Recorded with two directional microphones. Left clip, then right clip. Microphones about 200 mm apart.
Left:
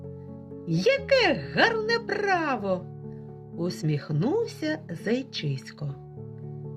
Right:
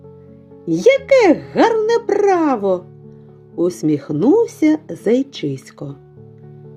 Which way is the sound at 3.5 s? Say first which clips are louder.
Right 14 dB; 55° right (ahead or behind).